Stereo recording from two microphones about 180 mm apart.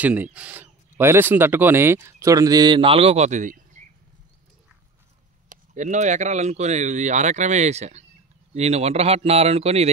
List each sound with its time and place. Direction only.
0.0 s speech: 10° right (ahead or behind); by 3.6 s 45° right (ahead or behind)
5.5 s speech: 40° right (ahead or behind)